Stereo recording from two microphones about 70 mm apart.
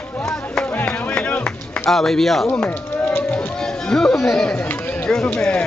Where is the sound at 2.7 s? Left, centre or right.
Left.